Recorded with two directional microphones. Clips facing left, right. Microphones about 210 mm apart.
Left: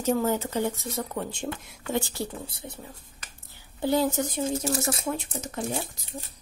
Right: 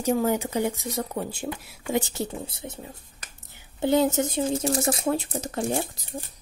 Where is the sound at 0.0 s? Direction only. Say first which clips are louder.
Right 2 dB; 15° right (ahead or behind).